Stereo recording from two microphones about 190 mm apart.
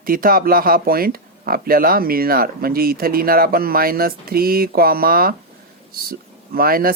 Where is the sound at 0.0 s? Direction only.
50° right (ahead or behind).